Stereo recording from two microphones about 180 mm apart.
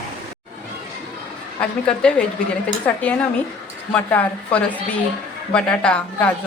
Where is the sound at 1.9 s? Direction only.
5° left (ahead or behind).